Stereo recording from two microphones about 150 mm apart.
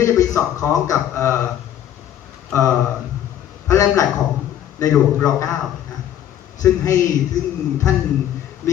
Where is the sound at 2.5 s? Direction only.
20° left (ahead or behind).